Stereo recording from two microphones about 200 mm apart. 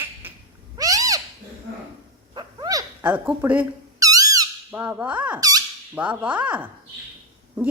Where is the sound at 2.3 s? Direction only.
20° right (ahead or behind).